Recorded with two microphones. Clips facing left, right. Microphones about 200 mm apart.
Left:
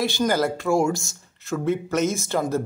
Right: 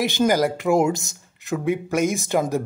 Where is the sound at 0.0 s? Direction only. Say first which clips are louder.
Right 3 dB; 20° right (ahead or behind).